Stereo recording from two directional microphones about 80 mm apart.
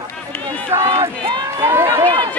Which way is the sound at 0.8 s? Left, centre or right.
Right.